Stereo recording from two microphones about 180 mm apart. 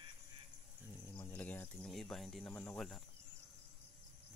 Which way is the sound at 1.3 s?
10° left (ahead or behind).